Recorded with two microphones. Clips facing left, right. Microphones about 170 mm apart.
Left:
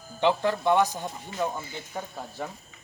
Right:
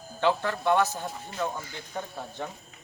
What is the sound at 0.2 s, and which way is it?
Speech, 15° left (ahead or behind).